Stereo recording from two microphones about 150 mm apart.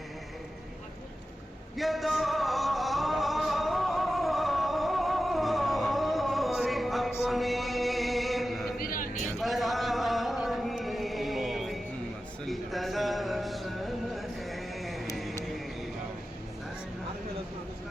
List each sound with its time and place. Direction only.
1.7 s music: centre (ahead or behind)
8.8 s vehicle: 70° left (ahead or behind)
9.4 s chant: centre (ahead or behind)
12.5 s a sound: centre (ahead or behind)
15.1 s music: centre (ahead or behind)